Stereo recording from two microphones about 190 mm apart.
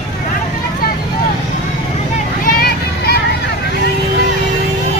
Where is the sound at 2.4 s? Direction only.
50° left (ahead or behind).